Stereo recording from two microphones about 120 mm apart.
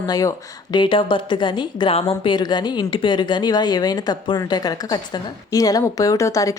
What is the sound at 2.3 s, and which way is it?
A woman's voice, 35° left (ahead or behind).